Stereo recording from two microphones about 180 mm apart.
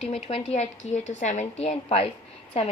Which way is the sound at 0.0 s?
35° left (ahead or behind).